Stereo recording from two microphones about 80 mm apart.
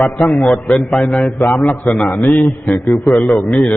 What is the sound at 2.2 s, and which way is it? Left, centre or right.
Speech, left.